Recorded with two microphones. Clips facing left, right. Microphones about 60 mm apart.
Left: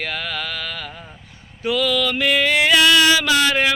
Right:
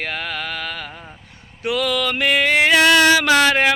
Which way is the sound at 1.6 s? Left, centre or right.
Right.